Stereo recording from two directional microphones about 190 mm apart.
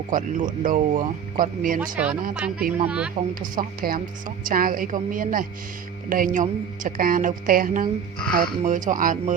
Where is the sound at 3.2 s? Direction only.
45° right (ahead or behind).